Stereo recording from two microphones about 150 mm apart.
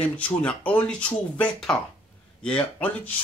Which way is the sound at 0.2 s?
10° left (ahead or behind).